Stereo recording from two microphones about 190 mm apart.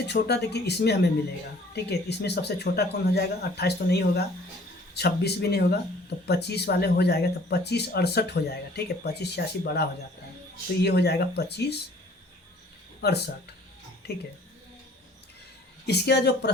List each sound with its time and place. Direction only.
0.1 s speech: 60° left (ahead or behind)
13.0 s speech: 60° left (ahead or behind)
15.9 s speech: 60° left (ahead or behind)